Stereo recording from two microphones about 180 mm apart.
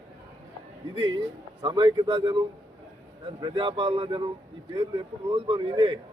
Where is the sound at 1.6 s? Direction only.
25° right (ahead or behind).